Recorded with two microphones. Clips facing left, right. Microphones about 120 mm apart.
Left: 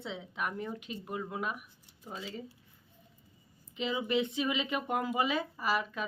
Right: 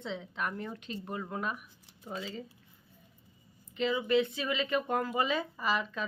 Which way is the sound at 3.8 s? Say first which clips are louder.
Right 3 dB; 15° left (ahead or behind).